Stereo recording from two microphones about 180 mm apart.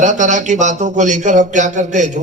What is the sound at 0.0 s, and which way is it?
A man's voice, 45° right (ahead or behind).